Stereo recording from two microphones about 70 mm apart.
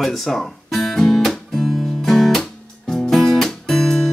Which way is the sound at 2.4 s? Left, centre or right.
Centre.